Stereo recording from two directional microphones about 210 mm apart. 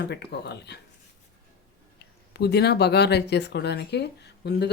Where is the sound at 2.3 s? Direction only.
50° left (ahead or behind).